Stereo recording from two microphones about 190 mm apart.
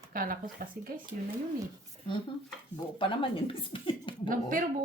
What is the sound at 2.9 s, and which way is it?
Speech, 25° left (ahead or behind).